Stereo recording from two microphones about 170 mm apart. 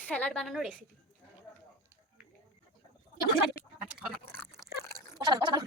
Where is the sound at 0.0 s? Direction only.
10° left (ahead or behind).